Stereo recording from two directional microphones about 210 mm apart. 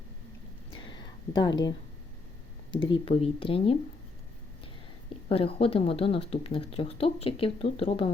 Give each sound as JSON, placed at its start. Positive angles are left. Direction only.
{"t": 1.0, "sound": "a sound", "side_deg": 20}
{"t": 3.0, "sound": "speech", "side_deg": 25}
{"t": 5.3, "sound": "speech", "side_deg": 25}